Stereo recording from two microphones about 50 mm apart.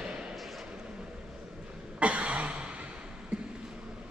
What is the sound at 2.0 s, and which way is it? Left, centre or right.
Throat clearing, right.